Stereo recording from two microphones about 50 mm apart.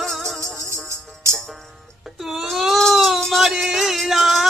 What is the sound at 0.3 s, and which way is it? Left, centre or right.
Music, right.